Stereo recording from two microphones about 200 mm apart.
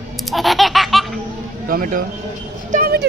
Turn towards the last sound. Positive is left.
turn(degrees=-50)  # may be behind; listen again after turning